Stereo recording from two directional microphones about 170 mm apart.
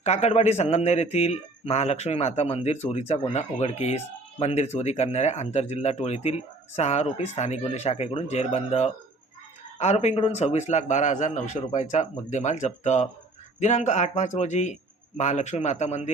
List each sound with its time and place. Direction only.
0.0 s speech: 40° left (ahead or behind)